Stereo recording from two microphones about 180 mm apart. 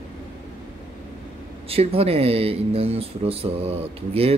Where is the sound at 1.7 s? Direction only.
35° right (ahead or behind).